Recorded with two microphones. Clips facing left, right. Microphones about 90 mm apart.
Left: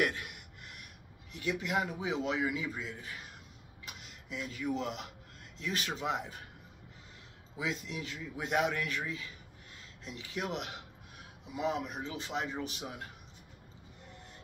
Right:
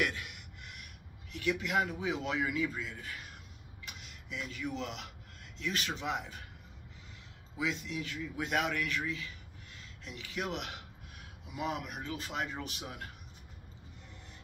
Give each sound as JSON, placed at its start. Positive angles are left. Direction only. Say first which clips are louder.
{"t": 0.0, "sound": "speech", "louder": "left 2 dB", "side_deg": 35}
{"t": 7.5, "sound": "speech", "louder": "right 1 dB", "side_deg": 35}